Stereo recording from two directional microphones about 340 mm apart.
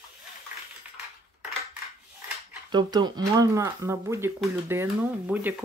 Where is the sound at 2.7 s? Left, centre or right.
Centre.